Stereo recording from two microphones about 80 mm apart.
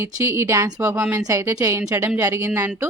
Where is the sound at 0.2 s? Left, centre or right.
Right.